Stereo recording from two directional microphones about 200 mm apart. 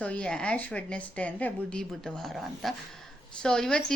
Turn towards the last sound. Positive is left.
turn(degrees=5)  # may be behind; listen again after turning